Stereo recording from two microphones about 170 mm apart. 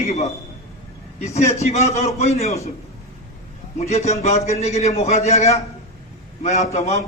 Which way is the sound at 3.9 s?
40° left (ahead or behind).